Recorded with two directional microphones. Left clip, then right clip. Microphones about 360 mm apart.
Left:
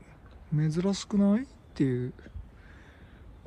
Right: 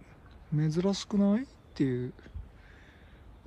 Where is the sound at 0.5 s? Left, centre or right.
Centre.